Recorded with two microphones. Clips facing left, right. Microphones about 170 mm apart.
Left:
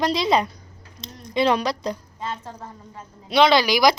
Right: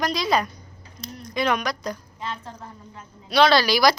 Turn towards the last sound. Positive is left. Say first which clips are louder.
# left 1 dB
turn(degrees=20)  # may be behind; listen again after turning